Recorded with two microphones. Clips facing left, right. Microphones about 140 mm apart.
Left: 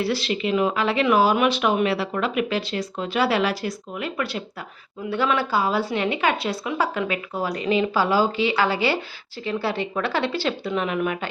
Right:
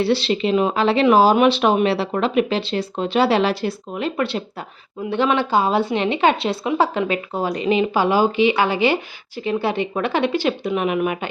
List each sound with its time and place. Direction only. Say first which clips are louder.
0.0 s speech: right 5 dB; 30° right (ahead or behind)